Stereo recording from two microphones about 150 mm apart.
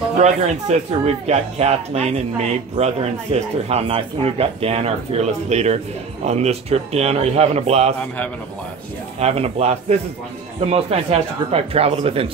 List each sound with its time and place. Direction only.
0.2 s speech: 45° right (ahead or behind)
9.2 s speech: 45° right (ahead or behind)